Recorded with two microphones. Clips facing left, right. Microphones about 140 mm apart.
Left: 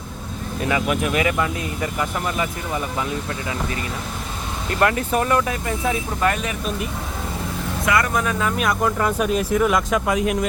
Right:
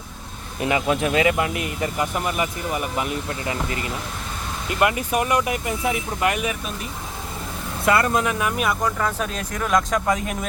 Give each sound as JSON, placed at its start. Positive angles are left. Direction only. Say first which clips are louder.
{"t": 0.7, "sound": "speech", "louder": "right 1 dB", "side_deg": -25}
{"t": 4.8, "sound": "speech", "louder": "left 1 dB", "side_deg": -10}
{"t": 7.9, "sound": "speech", "louder": "right 2 dB", "side_deg": -30}